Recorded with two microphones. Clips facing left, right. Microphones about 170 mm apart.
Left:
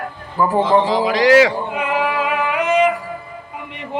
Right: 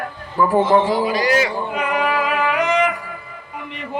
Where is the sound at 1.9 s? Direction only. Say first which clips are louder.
Left 1 dB; 25° left (ahead or behind).